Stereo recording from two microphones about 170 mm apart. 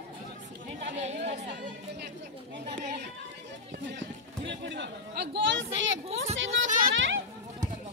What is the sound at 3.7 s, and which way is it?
Run, 90° right.